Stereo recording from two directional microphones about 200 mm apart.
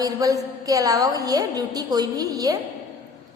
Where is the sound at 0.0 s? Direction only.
15° right (ahead or behind).